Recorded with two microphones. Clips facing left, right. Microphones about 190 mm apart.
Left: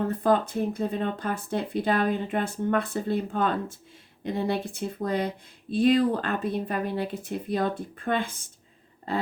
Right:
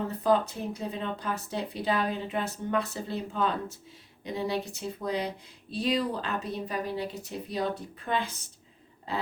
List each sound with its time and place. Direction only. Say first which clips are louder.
0.1 s speech: left 2 dB; 50° left (ahead or behind)